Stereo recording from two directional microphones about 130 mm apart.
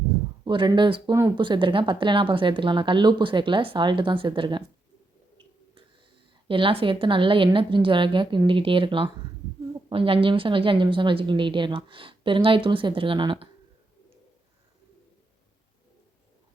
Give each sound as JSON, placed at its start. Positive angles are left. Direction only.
{"t": 0.4, "sound": "a woman's voice", "side_deg": -40}
{"t": 6.5, "sound": "a woman's voice", "side_deg": -40}